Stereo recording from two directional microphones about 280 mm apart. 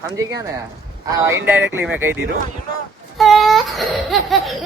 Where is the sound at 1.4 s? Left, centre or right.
Centre.